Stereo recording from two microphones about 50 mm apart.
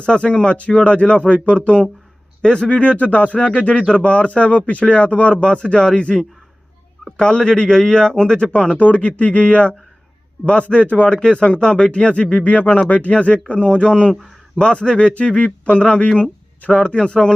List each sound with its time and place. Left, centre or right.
0.0 s speech: left